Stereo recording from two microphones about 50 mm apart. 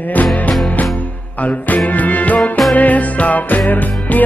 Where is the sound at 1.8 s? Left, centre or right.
Left.